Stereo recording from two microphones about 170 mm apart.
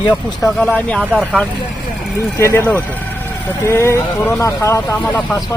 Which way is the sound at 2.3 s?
15° left (ahead or behind).